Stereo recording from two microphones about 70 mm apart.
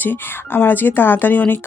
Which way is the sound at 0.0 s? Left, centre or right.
Left.